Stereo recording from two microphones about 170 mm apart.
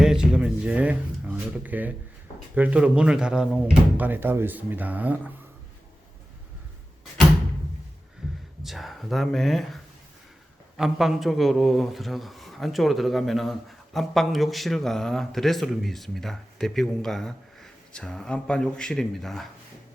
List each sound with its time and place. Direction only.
0.0 s a sound: 5° right (ahead or behind)
2.6 s speech: 10° right (ahead or behind)
8.2 s heart sounds: 5° right (ahead or behind)
8.6 s speech: centre (ahead or behind)